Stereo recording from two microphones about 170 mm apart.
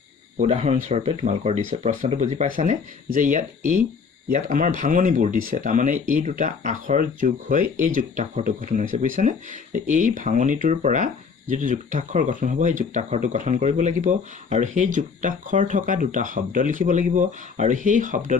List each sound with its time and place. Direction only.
0.3 s speech: 40° right (ahead or behind)